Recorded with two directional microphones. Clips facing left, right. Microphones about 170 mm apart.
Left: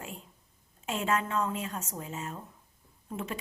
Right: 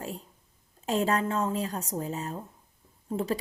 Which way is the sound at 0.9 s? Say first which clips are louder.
Right 4 dB; 35° right (ahead or behind).